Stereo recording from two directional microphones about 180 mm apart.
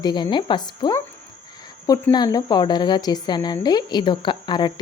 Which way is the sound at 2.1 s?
20° left (ahead or behind).